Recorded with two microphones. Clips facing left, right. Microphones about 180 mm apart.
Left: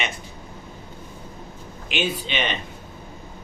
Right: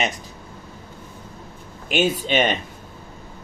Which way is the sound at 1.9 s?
45° right (ahead or behind).